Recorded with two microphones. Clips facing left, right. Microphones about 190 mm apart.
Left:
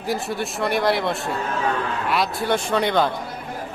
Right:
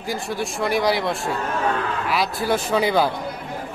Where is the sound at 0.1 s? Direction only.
Centre (ahead or behind).